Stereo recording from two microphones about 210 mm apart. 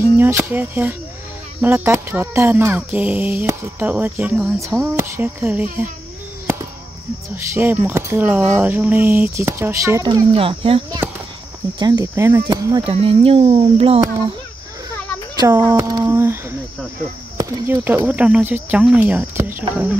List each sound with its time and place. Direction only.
0.0 s speech: 10° right (ahead or behind)
7.3 s speech: 10° right (ahead or behind)
10.3 s speech: 25° right (ahead or behind)
11.8 s speech: 15° right (ahead or behind)
15.3 s a sound: 15° right (ahead or behind)
15.7 s speech: 15° right (ahead or behind)